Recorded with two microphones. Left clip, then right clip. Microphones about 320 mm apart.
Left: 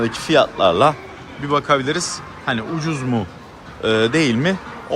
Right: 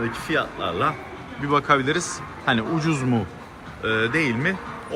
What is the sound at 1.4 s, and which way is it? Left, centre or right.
Speech, centre.